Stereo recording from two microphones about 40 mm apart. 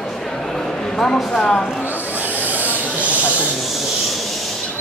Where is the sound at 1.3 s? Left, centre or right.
Left.